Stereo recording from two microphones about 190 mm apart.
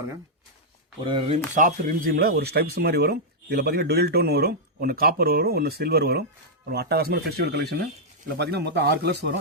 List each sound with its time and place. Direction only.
1.0 s speech: 25° right (ahead or behind)
1.5 s speech: 45° right (ahead or behind); by 9.3 s 60° right (ahead or behind)